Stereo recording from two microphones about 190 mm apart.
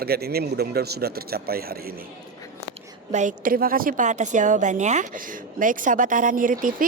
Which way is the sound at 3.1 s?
40° right (ahead or behind).